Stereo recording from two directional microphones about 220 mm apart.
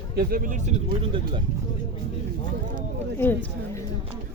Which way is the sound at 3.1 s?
10° left (ahead or behind).